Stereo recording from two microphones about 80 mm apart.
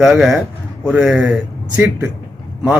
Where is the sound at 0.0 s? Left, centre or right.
Centre.